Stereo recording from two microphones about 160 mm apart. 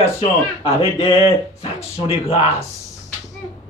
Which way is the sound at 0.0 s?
35° left (ahead or behind).